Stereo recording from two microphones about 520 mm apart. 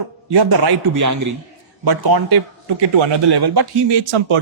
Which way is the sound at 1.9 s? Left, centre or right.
Right.